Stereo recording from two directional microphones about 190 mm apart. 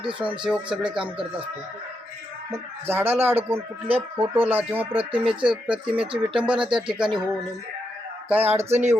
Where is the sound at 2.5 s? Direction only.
10° right (ahead or behind).